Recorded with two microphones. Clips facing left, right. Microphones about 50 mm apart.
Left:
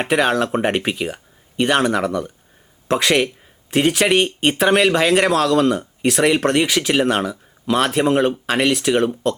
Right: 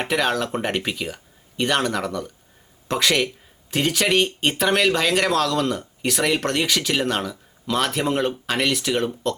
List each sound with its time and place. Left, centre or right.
0.0 s speech: centre
3.1 s a man's voice: left
3.7 s speech: centre
5.8 s speech: centre